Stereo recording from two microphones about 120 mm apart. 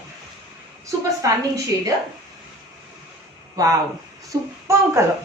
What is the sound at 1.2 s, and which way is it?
Speech, 25° right (ahead or behind).